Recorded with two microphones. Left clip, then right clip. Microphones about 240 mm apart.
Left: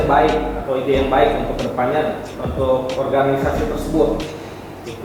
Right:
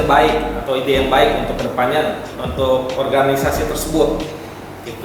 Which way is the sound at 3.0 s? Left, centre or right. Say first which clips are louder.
Right 2 dB; centre.